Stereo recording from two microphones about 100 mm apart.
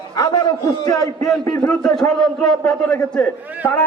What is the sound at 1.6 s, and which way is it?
A man's voice, 5° left (ahead or behind).